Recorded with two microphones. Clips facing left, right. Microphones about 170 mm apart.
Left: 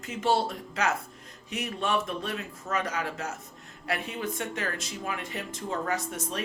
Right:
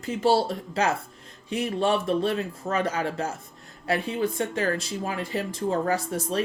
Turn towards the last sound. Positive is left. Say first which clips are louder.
# right 7 dB
turn(degrees=-35)  # may be behind; listen again after turning